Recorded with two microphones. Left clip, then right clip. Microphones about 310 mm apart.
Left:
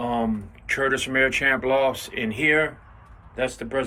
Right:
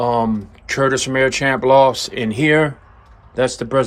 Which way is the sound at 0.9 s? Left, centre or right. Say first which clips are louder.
Right 4 dB; centre.